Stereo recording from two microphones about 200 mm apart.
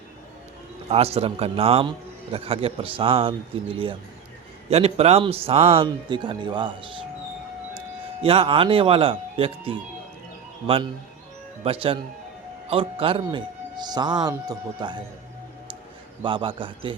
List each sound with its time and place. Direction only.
0.9 s a man's voice: 30° right (ahead or behind)
8.2 s a man's voice: 30° right (ahead or behind)
11.6 s a man's voice: 30° right (ahead or behind)
16.2 s a man's voice: 25° right (ahead or behind)